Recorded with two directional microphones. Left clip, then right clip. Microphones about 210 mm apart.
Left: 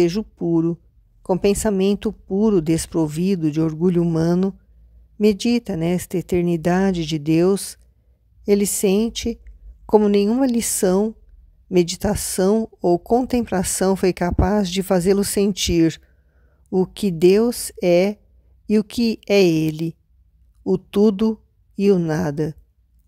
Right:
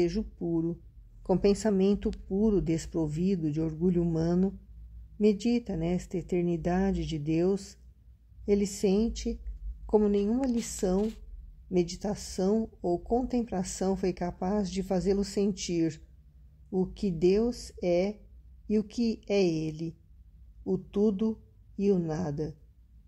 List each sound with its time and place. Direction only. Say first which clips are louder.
0.0 s speech: left 10 dB; 35° left (ahead or behind)